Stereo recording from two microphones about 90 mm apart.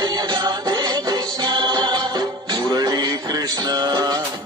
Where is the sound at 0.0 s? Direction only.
50° right (ahead or behind).